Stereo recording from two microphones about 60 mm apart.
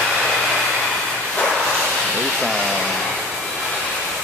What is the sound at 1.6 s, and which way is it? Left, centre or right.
Bow-wow, centre.